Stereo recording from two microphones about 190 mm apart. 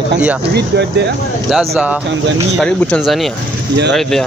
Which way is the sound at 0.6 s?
65° right (ahead or behind).